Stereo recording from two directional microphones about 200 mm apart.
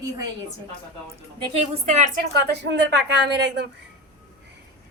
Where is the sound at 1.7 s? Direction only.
35° right (ahead or behind).